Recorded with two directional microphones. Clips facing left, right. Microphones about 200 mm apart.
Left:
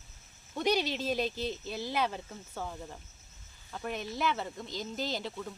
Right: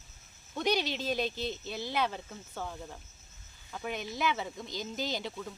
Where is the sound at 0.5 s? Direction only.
5° left (ahead or behind).